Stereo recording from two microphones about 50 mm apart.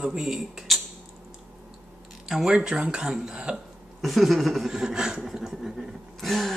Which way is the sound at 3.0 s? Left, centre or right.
Centre.